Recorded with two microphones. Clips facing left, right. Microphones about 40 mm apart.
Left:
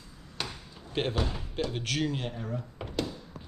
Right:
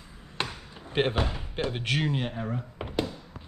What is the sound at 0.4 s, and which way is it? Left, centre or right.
Chop, right.